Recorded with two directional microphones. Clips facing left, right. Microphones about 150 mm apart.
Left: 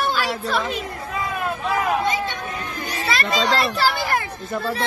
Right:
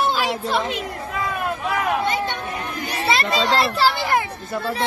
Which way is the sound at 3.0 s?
25° right (ahead or behind).